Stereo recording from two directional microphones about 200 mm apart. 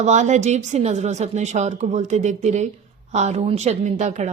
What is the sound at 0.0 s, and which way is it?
Speech, 35° right (ahead or behind).